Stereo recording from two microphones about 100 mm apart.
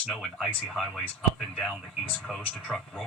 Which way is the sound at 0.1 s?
5° left (ahead or behind).